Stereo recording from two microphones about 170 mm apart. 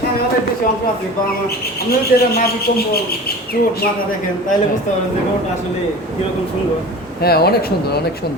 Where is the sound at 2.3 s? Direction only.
65° left (ahead or behind).